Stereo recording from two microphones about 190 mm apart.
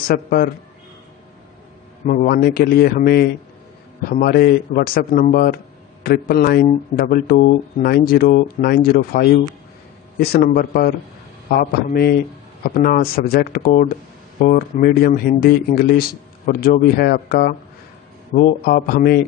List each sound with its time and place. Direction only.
0.1 s speech: 50° left (ahead or behind)
2.0 s speech: 50° left (ahead or behind)